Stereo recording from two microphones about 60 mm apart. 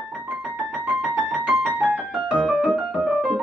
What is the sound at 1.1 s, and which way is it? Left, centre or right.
Music, centre.